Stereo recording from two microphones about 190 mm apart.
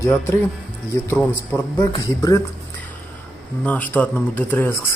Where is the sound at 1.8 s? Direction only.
20° left (ahead or behind).